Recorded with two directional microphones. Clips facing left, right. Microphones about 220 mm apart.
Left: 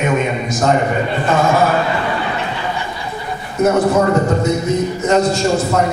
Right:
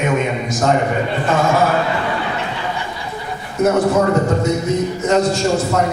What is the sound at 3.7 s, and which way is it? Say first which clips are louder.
A man's voice: left 1 dB; 25° left (ahead or behind).